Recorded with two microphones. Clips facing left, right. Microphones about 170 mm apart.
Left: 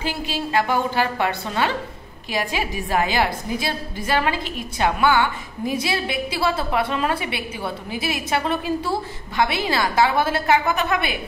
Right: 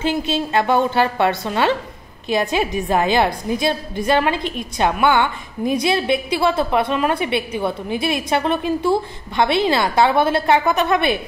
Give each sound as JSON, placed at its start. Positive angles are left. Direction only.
{"t": 0.0, "sound": "a woman's voice", "side_deg": -25}